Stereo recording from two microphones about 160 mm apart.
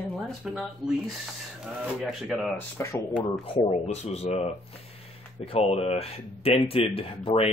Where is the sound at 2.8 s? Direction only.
15° left (ahead or behind).